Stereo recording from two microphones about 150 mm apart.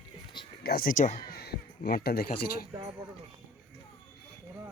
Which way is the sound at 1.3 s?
90° left.